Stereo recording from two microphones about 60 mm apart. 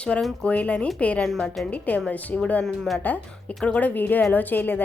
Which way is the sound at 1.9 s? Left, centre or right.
Left.